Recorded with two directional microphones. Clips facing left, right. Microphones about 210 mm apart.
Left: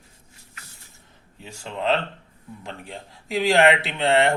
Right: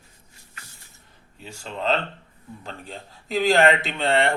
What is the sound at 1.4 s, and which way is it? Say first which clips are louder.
A man's voice: left 1 dB; 15° left (ahead or behind).